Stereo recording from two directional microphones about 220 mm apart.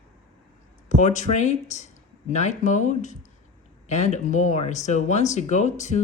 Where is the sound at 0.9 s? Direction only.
35° left (ahead or behind).